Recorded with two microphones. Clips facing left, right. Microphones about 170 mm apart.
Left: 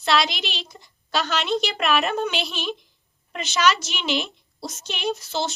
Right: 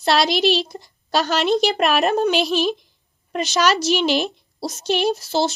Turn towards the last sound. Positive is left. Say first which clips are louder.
# right 6 dB
turn(degrees=-35)  # may be behind; listen again after turning